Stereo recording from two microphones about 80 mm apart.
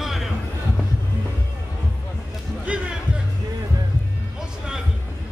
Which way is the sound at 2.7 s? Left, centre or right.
Centre.